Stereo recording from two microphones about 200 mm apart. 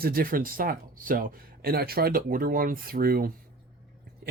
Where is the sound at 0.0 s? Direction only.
45° right (ahead or behind).